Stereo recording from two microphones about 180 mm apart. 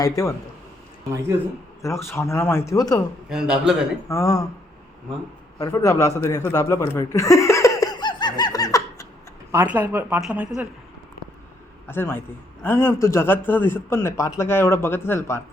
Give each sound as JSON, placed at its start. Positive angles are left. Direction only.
{"t": 0.0, "sound": "a man's voice", "side_deg": 20}
{"t": 1.8, "sound": "a man's voice", "side_deg": 15}
{"t": 3.2, "sound": "a man's voice", "side_deg": -5}
{"t": 4.1, "sound": "a man's voice", "side_deg": 20}
{"t": 5.5, "sound": "a man's voice", "side_deg": 20}
{"t": 6.1, "sound": "laughter", "side_deg": 15}
{"t": 9.5, "sound": "speech", "side_deg": -10}
{"t": 11.9, "sound": "a man's voice", "side_deg": 10}